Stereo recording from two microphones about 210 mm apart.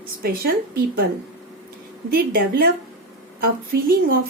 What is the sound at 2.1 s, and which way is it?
A woman's voice, 45° right (ahead or behind).